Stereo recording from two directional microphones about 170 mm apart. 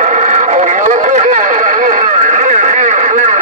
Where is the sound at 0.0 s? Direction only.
45° right (ahead or behind).